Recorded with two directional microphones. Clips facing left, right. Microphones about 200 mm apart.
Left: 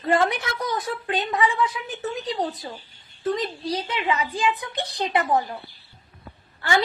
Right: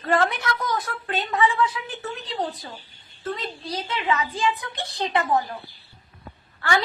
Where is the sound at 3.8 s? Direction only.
15° left (ahead or behind).